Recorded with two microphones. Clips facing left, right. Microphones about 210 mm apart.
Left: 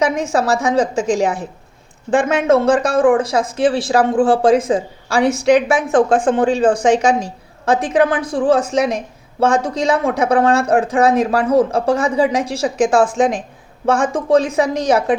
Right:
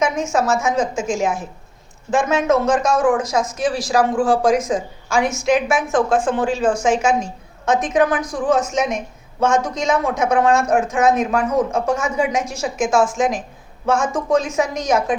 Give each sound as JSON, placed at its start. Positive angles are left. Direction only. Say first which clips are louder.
{"t": 0.0, "sound": "a woman's voice", "louder": "left 2 dB", "side_deg": 35}